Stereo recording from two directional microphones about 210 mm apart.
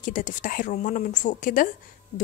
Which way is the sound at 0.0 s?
40° left (ahead or behind).